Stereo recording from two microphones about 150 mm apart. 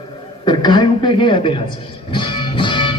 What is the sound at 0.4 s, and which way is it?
A man's voice, 30° left (ahead or behind).